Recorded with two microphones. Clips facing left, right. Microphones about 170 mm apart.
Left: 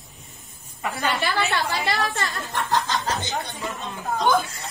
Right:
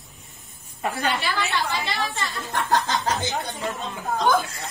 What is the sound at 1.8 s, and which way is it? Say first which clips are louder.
Speech: left 3 dB; 70° left (ahead or behind).